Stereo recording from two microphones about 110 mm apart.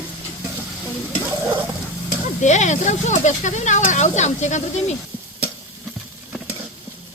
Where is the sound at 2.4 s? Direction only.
90° left.